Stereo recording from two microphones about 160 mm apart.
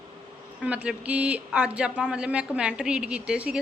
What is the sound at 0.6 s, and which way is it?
Speech, 5° right (ahead or behind).